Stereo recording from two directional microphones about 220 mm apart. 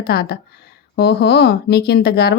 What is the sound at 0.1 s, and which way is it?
Speech, 45° left (ahead or behind).